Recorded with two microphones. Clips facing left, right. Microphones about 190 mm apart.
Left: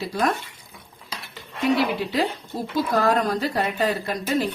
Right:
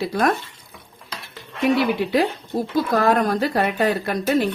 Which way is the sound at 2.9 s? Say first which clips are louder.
Right 2 dB; 60° right (ahead or behind).